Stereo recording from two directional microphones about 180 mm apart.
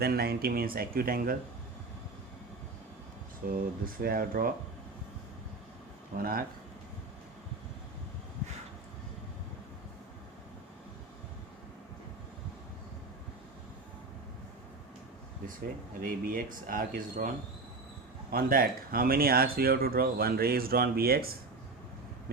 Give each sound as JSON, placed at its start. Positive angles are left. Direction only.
{"t": 0.0, "sound": "speech", "side_deg": -60}
{"t": 3.4, "sound": "speech", "side_deg": -50}
{"t": 6.1, "sound": "speech", "side_deg": -55}
{"t": 16.0, "sound": "speech", "side_deg": -50}